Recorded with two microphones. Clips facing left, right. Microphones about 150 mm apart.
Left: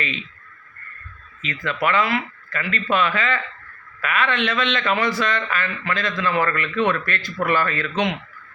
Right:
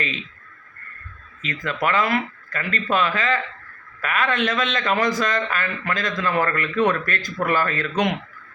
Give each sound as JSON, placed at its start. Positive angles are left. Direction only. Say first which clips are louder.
{"t": 1.5, "sound": "a man's voice", "louder": "left 1 dB", "side_deg": -40}